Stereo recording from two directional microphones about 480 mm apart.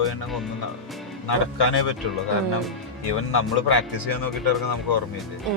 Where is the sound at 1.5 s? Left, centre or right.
Left.